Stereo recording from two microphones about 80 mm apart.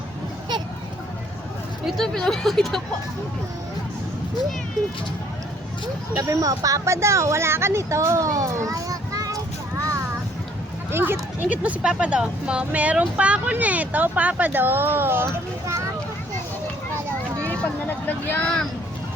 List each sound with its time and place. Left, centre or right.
1.8 s speech: centre
6.1 s speech: right
10.9 s speech: right
17.4 s vehicle: left